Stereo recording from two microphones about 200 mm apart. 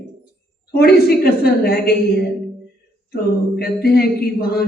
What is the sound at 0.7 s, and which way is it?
Speech, 50° left (ahead or behind).